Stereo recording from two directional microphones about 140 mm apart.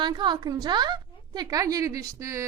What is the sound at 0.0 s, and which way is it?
A woman's voice, 35° right (ahead or behind).